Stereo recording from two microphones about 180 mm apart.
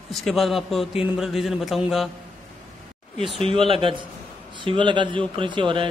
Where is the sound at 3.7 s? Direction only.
30° right (ahead or behind).